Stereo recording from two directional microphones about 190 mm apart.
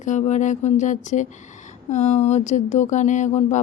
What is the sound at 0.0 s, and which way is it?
Speech, 40° left (ahead or behind).